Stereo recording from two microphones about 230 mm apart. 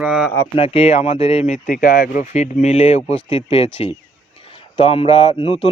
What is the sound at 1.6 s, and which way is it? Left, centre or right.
Speech, left.